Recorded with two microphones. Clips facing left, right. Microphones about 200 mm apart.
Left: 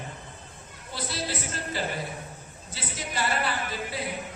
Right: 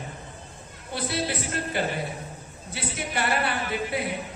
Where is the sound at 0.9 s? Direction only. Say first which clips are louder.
Right 4 dB; 60° right (ahead or behind).